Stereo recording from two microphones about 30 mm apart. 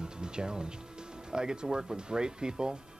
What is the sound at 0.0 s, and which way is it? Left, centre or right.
Music, right.